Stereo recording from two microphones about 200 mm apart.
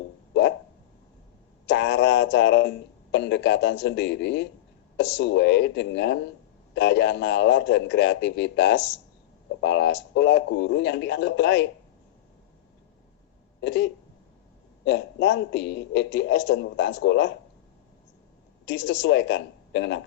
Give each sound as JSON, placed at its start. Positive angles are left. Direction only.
{"t": 1.6, "sound": "a man's voice", "side_deg": 60}
{"t": 13.6, "sound": "a man's voice", "side_deg": 60}
{"t": 18.6, "sound": "a woman's voice", "side_deg": 60}